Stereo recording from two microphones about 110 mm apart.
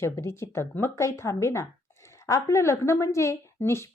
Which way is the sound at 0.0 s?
25° left (ahead or behind).